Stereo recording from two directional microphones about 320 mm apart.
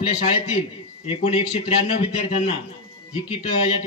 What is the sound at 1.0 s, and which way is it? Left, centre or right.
A man's voice, centre.